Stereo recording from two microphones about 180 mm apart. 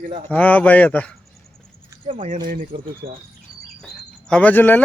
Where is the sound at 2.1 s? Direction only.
45° right (ahead or behind).